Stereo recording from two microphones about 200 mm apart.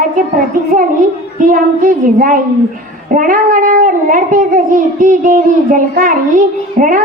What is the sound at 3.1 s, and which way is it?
A child's voice, 40° right (ahead or behind).